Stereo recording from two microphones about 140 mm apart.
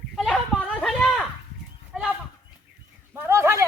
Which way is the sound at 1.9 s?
5° right (ahead or behind).